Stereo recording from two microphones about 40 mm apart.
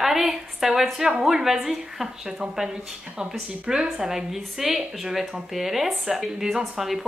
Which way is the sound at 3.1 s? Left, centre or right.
Right.